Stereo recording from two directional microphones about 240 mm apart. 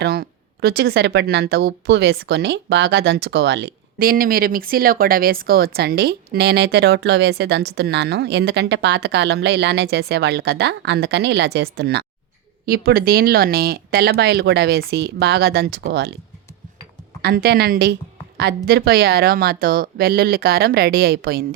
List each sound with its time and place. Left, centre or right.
0.0 s speech: right
17.2 s speech: right